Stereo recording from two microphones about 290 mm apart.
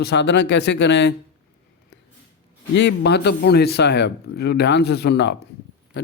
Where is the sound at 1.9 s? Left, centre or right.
Left.